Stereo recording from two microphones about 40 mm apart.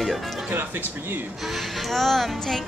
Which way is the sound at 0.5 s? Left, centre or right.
Right.